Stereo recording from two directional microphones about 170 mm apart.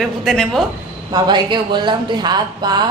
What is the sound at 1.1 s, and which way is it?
Speech, 25° right (ahead or behind).